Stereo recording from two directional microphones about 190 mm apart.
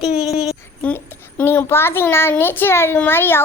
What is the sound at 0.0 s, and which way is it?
A child's voice, centre (ahead or behind).